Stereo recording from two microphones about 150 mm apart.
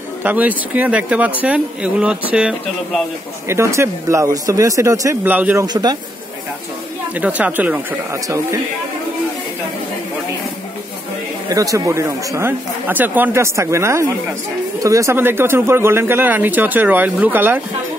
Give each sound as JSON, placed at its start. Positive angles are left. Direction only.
{"t": 0.2, "sound": "speech", "side_deg": -10}
{"t": 3.4, "sound": "speech", "side_deg": -20}
{"t": 5.7, "sound": "speech", "side_deg": -25}
{"t": 7.2, "sound": "speech", "side_deg": -10}
{"t": 11.4, "sound": "speech", "side_deg": -25}